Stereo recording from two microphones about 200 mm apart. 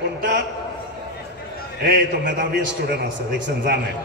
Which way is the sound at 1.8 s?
55° right (ahead or behind).